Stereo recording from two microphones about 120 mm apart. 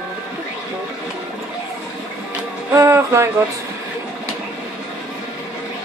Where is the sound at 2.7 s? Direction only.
20° right (ahead or behind).